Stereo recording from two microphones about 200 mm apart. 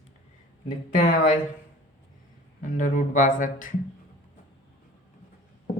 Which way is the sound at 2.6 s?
40° left (ahead or behind).